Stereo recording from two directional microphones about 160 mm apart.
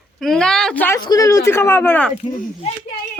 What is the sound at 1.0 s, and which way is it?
Speech, 20° left (ahead or behind).